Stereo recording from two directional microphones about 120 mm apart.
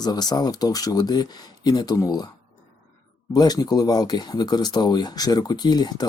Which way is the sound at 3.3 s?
35° left (ahead or behind).